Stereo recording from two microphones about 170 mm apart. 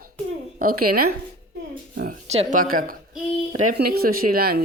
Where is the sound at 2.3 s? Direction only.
45° right (ahead or behind).